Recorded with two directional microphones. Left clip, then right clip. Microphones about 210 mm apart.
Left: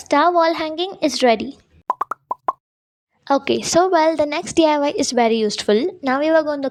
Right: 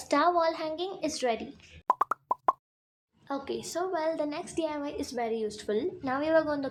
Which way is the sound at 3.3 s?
40° left (ahead or behind).